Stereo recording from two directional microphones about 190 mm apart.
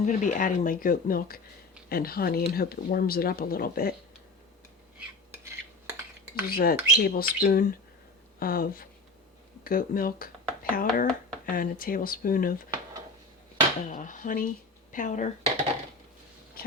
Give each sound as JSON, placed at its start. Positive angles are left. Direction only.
{"t": 0.0, "sound": "speech", "side_deg": 40}
{"t": 5.3, "sound": "cutlery", "side_deg": -10}
{"t": 6.5, "sound": "speech", "side_deg": 50}
{"t": 13.8, "sound": "speech", "side_deg": 45}